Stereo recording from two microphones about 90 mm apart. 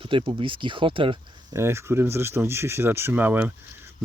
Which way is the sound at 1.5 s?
30° right (ahead or behind).